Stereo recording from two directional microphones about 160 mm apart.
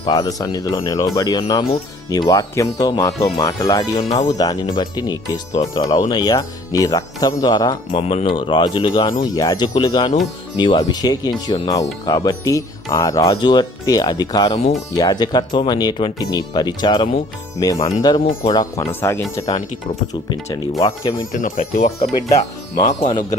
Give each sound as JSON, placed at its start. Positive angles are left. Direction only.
{"t": 0.0, "sound": "speech", "side_deg": 25}
{"t": 20.3, "sound": "speech", "side_deg": 25}
{"t": 21.3, "sound": "speech", "side_deg": 55}